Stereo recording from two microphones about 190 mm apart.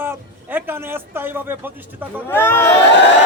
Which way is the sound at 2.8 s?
65° left (ahead or behind).